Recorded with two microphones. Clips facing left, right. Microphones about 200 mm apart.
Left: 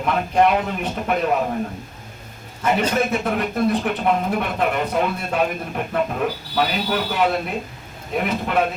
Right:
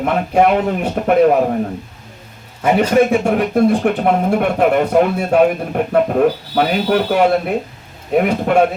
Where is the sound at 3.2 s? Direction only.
45° right (ahead or behind).